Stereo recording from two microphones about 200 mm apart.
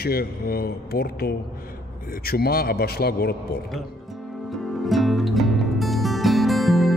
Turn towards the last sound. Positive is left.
turn(degrees=0)  # may be behind; listen again after turning